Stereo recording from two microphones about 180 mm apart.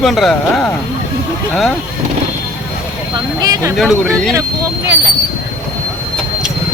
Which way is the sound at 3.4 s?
20° right (ahead or behind).